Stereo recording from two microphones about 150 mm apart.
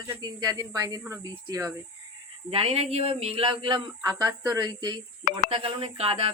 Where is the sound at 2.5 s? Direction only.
40° right (ahead or behind).